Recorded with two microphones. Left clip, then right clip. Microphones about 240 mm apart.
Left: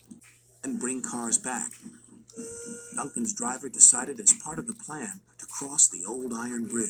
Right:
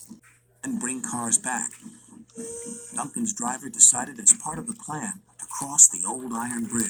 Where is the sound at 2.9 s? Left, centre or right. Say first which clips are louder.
Right 2 dB; right.